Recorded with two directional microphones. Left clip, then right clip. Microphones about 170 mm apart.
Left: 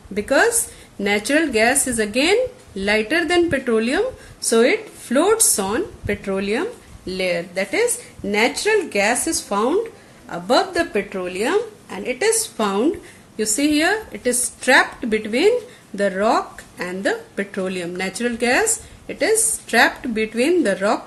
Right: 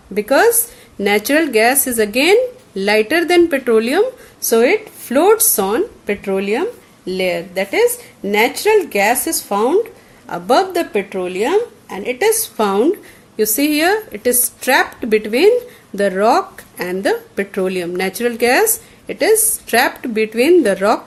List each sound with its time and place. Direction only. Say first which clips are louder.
0.1 s a woman's voice: right 4 dB; 55° right (ahead or behind)